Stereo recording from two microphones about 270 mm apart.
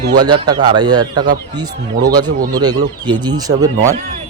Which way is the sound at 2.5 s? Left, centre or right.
Centre.